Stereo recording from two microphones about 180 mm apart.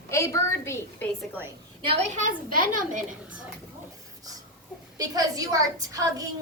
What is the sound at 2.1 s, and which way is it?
Speech, 50° right (ahead or behind).